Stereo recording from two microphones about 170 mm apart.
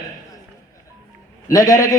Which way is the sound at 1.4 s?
20° left (ahead or behind).